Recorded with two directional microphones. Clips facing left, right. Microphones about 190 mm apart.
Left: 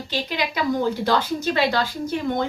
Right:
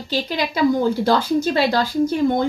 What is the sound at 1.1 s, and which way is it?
Speech, 35° right (ahead or behind).